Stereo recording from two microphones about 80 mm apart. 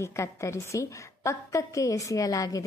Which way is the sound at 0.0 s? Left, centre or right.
Left.